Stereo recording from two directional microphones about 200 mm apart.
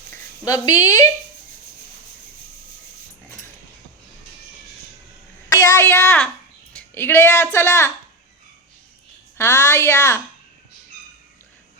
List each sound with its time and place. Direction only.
0.1 s a woman's voice: 15° left (ahead or behind)
5.5 s a child's voice: 15° left (ahead or behind)
9.4 s a woman's voice: 15° left (ahead or behind)